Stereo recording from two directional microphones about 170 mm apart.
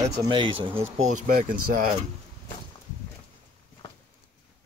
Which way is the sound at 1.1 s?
55° right (ahead or behind).